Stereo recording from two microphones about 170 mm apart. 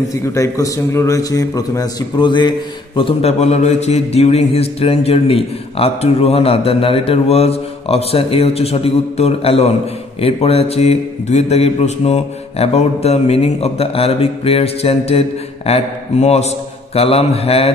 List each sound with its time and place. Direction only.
0.3 s a man's voice: 15° left (ahead or behind)
3.0 s mantra: 35° left (ahead or behind)